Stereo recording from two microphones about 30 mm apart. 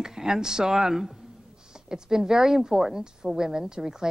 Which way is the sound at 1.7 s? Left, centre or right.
Right.